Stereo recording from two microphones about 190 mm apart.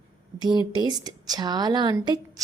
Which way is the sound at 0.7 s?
20° right (ahead or behind).